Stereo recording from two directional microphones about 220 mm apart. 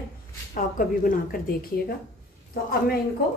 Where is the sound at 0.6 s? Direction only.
40° left (ahead or behind).